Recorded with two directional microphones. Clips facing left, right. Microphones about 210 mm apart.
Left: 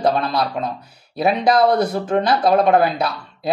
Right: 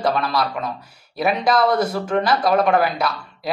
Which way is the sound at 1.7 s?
20° left (ahead or behind).